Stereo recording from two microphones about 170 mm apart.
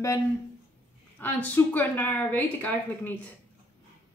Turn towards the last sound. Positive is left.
turn(degrees=10)  # may be behind; listen again after turning